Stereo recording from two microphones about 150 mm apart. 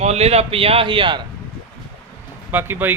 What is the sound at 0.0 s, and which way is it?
Speech, 45° right (ahead or behind).